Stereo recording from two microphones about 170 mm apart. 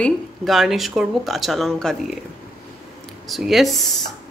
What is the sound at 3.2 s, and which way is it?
Speech, centre (ahead or behind).